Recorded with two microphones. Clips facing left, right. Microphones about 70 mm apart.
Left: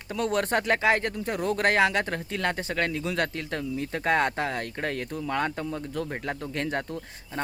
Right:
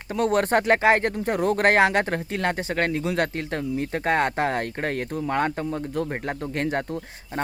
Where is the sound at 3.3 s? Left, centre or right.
Right.